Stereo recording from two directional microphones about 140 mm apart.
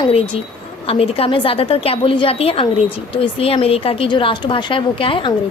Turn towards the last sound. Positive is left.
turn(degrees=40)  # may be behind; listen again after turning